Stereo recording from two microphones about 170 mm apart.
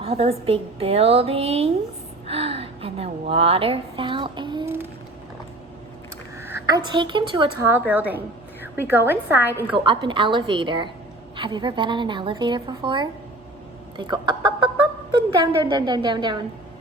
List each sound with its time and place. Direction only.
0.0 s a woman's voice: 35° right (ahead or behind)
4.6 s a sound: 15° right (ahead or behind)
6.7 s a woman's voice: 25° right (ahead or behind)
7.7 s a woman's voice: 10° right (ahead or behind)
9.7 s a woman's voice: 30° right (ahead or behind)
13.9 s a sound: 25° right (ahead or behind)
15.7 s a woman's voice: 25° right (ahead or behind)